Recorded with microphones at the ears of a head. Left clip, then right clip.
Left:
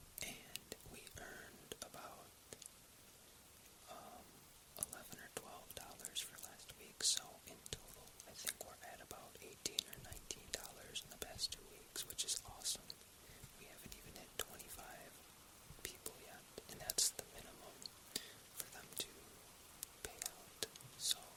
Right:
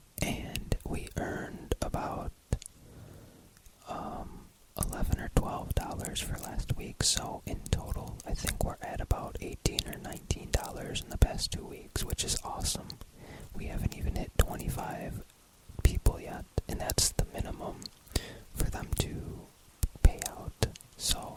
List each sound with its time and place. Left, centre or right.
0.2 s whispering: right
3.8 s whispering: right